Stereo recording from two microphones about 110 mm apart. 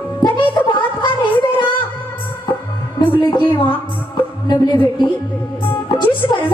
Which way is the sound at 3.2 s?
45° left (ahead or behind).